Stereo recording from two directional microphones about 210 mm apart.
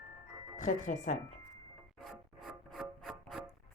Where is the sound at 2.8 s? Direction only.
Centre (ahead or behind).